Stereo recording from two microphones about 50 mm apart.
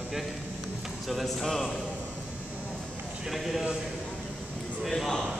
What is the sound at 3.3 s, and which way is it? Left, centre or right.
Speech, centre.